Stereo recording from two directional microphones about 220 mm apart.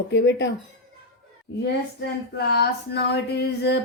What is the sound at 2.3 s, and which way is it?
Speech, 45° left (ahead or behind).